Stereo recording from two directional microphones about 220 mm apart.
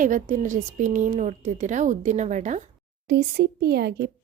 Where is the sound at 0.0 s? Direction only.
35° right (ahead or behind).